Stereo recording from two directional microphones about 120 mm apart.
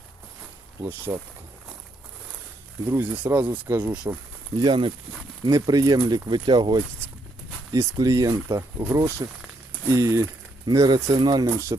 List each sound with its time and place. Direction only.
0.8 s speech: 25° right (ahead or behind)
2.9 s speech: 20° right (ahead or behind)
4.6 s speech: 45° right (ahead or behind)
5.5 s speech: 30° right (ahead or behind)